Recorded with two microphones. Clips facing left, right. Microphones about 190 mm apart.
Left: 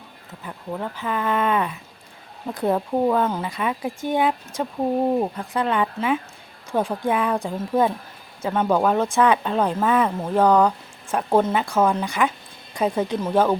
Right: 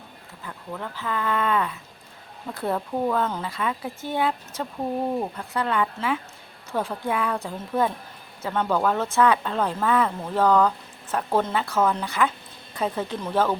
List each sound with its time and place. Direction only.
0.4 s speech: 20° left (ahead or behind)